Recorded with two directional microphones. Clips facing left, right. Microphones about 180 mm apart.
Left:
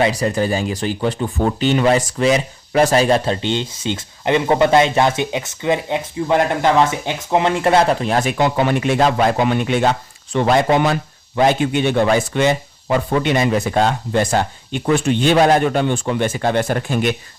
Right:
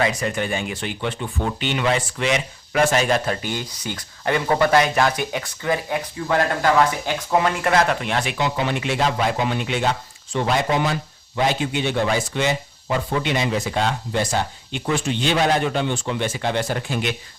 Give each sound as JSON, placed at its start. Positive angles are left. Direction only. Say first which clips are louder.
{"t": 0.0, "sound": "speech", "louder": "left 5 dB", "side_deg": 35}
{"t": 10.3, "sound": "speech", "louder": "left 6 dB", "side_deg": 65}